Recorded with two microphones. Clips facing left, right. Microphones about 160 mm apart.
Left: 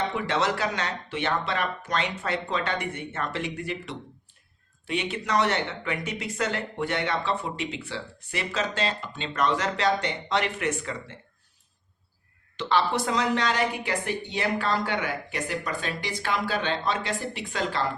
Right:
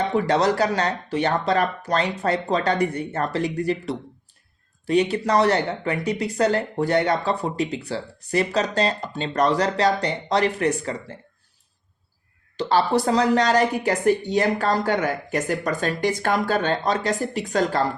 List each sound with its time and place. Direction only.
0.1 s speech: 40° right (ahead or behind)
12.5 s a woman's voice: 40° right (ahead or behind)